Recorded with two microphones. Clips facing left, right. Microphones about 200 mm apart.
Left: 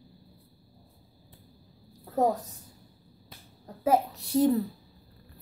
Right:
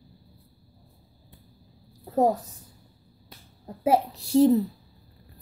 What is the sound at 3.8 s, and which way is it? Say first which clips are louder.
Speech: right 2 dB; 30° right (ahead or behind).